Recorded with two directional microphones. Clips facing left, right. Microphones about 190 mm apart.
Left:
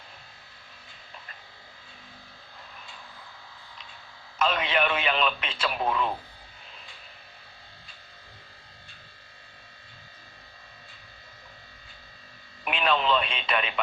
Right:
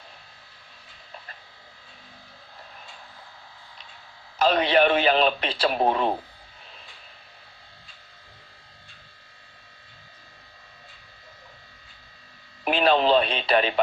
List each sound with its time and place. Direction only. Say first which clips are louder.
4.4 s speech: right 6 dB; 35° right (ahead or behind)
12.6 s radio: right 6 dB; 35° right (ahead or behind)